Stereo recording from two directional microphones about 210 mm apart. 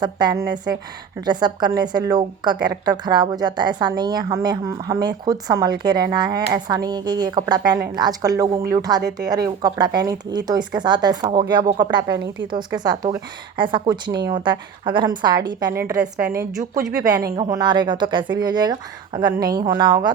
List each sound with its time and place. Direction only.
0.0 s speech: 20° right (ahead or behind)
17.1 s speech: 20° right (ahead or behind)